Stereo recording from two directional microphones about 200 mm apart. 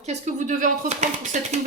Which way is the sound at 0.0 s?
35° right (ahead or behind).